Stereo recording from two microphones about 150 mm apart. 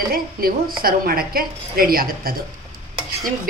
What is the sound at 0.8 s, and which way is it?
A woman's voice, 80° right.